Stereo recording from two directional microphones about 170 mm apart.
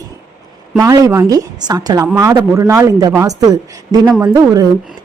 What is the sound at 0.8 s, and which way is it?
Speech, 20° right (ahead or behind).